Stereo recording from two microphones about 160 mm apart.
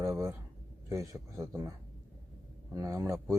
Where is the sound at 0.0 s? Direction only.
20° right (ahead or behind).